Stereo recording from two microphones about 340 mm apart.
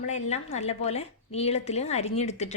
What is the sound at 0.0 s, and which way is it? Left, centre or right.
Speech, centre.